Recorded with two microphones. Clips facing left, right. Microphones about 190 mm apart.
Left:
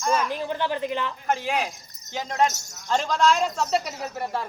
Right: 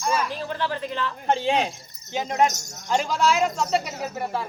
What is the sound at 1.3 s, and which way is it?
Speech, 25° right (ahead or behind).